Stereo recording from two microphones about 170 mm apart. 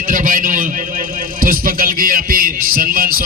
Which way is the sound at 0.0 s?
50° right (ahead or behind).